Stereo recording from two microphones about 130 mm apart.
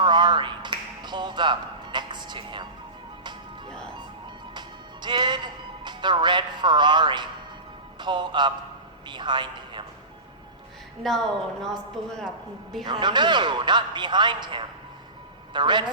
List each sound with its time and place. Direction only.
0.0 s a sound: 35° right (ahead or behind)
4.5 s music: 35° right (ahead or behind)
7.9 s a man's voice: 35° right (ahead or behind)
11.1 s speech: centre (ahead or behind)
12.8 s a man's voice: 35° right (ahead or behind)